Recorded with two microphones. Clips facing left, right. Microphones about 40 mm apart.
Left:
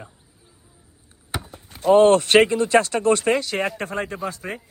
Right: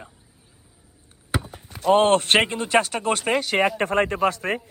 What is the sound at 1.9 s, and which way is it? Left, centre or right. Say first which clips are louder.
Speech: left 3 dB; right.